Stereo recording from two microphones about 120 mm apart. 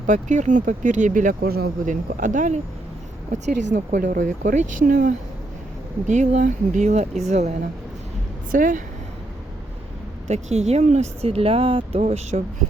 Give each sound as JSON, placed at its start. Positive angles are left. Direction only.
{"t": 0.1, "sound": "speech", "side_deg": -90}
{"t": 8.5, "sound": "speech", "side_deg": -90}
{"t": 10.2, "sound": "speech", "side_deg": -70}